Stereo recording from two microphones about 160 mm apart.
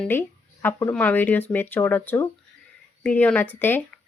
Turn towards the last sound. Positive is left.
turn(degrees=10)  # may be behind; listen again after turning